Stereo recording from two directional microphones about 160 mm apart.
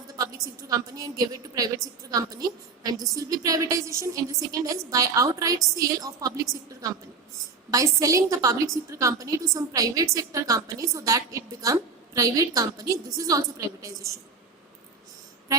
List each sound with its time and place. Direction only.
0.2 s a woman's voice: 20° right (ahead or behind)